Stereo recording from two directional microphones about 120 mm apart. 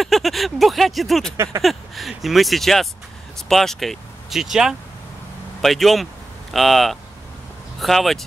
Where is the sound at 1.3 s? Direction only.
25° right (ahead or behind).